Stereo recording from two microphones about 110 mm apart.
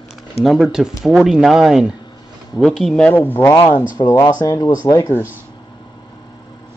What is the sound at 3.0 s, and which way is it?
Speech, 20° left (ahead or behind).